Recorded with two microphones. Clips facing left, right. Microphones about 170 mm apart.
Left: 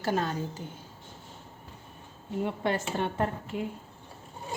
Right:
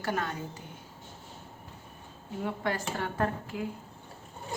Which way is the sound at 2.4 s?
25° left (ahead or behind).